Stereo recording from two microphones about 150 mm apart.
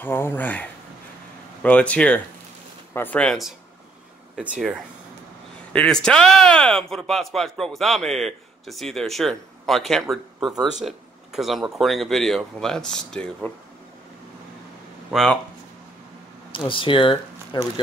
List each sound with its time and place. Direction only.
0.0 s speech: 15° left (ahead or behind)
4.6 s speech: centre (ahead or behind)
16.5 s speech: 35° left (ahead or behind)